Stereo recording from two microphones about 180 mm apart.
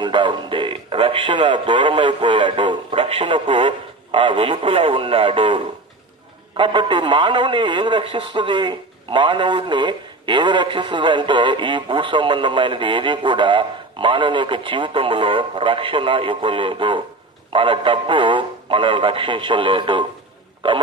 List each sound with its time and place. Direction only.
0.0 s speech: 25° right (ahead or behind)